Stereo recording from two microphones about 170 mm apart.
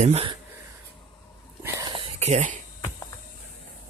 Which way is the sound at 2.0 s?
40° right (ahead or behind).